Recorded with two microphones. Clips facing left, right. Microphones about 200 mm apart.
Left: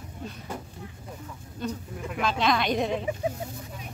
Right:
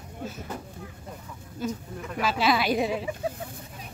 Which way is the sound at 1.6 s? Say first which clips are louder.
Right 1 dB; 5° right (ahead or behind).